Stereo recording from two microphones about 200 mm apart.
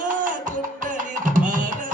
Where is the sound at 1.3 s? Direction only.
40° right (ahead or behind).